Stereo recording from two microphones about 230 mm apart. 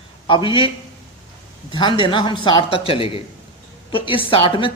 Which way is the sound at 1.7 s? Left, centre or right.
Left.